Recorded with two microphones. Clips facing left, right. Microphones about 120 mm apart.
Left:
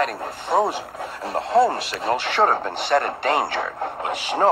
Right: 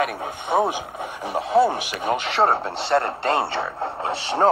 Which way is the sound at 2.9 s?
25° right (ahead or behind).